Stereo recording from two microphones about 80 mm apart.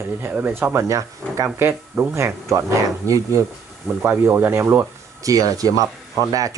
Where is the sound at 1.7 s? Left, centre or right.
Right.